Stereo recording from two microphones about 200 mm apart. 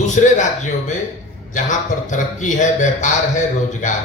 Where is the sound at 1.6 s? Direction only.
40° left (ahead or behind).